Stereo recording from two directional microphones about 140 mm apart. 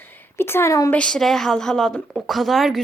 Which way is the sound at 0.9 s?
5° left (ahead or behind).